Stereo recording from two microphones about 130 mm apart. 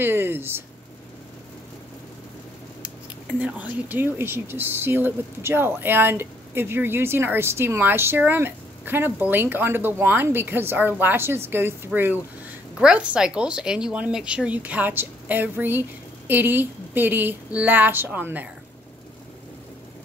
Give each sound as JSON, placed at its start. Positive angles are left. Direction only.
{"t": 0.0, "sound": "speech", "side_deg": -15}
{"t": 3.3, "sound": "a woman's voice", "side_deg": -10}